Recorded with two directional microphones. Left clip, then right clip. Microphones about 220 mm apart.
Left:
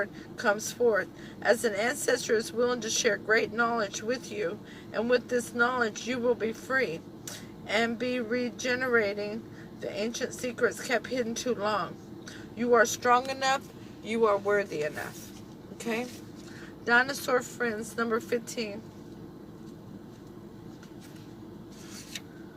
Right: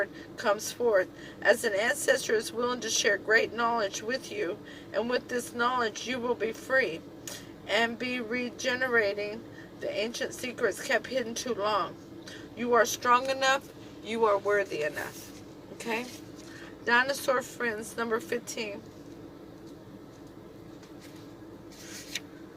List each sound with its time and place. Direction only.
0.0 s speech: 25° right (ahead or behind)